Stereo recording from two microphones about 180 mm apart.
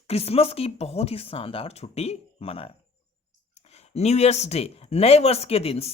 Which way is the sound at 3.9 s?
35° left (ahead or behind).